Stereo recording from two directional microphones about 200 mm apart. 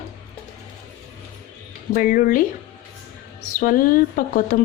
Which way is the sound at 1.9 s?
45° left (ahead or behind).